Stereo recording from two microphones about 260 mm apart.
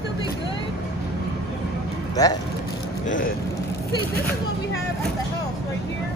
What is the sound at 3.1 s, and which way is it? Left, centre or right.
Speech, left.